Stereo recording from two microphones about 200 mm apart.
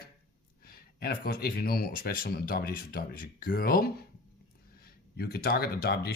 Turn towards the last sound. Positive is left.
turn(degrees=50)  # may be behind; listen again after turning